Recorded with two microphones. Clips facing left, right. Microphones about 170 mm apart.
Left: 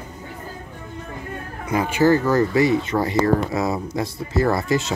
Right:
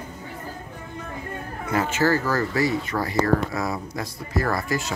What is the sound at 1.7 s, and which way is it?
Speech, 15° left (ahead or behind).